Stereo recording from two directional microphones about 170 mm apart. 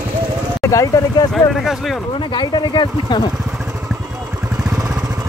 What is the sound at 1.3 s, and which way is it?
Speech, centre (ahead or behind).